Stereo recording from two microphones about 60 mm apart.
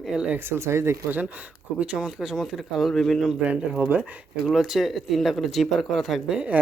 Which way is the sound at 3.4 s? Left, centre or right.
Right.